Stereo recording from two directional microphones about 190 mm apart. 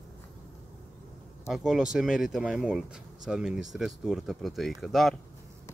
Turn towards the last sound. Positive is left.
turn(degrees=0)  # may be behind; listen again after turning